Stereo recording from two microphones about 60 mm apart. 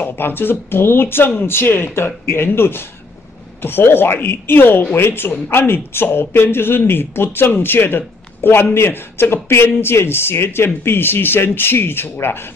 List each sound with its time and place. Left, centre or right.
0.0 s speech: left